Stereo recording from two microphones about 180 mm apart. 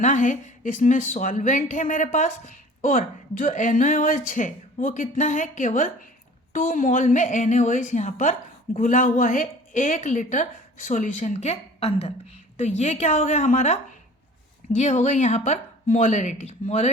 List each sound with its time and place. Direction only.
0.0 s a woman's voice: 40° left (ahead or behind)